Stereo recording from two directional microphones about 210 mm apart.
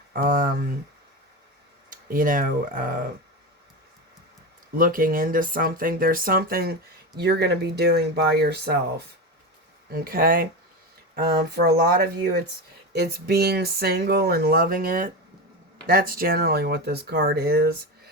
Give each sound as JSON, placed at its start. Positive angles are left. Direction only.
{"t": 0.1, "sound": "speech", "side_deg": -40}
{"t": 1.9, "sound": "speech", "side_deg": -40}
{"t": 4.8, "sound": "speech", "side_deg": -40}
{"t": 9.9, "sound": "speech", "side_deg": -45}